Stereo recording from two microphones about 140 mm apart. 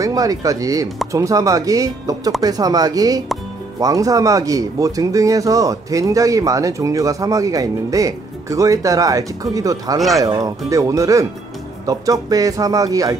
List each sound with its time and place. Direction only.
0.0 s speech: 25° right (ahead or behind)
9.9 s speech: centre (ahead or behind)
10.2 s speech: 25° right (ahead or behind)